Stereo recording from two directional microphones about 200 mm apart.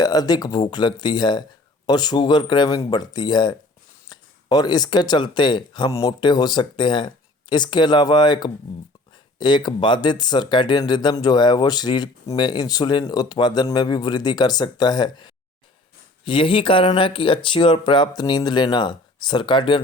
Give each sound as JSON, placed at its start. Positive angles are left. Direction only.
{"t": 0.0, "sound": "speech", "side_deg": 20}